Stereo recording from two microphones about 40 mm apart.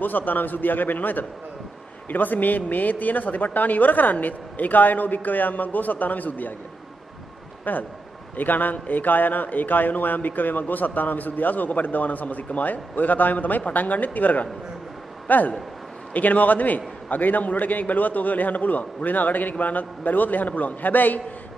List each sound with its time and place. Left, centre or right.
0.0 s a man's voice: left
7.7 s a man's voice: left